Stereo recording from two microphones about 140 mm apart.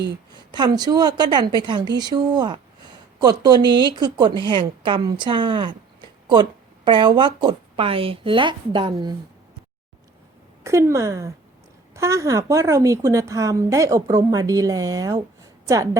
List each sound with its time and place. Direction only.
0.3 s a woman's voice: 30° right (ahead or behind)
10.6 s a woman's voice: 20° right (ahead or behind)